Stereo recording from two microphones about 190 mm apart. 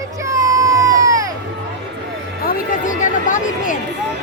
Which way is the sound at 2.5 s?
45° left (ahead or behind).